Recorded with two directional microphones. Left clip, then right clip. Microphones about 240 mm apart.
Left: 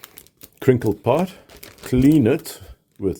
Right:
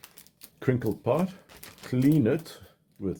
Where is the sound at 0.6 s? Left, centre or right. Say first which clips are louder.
Left 10 dB; left.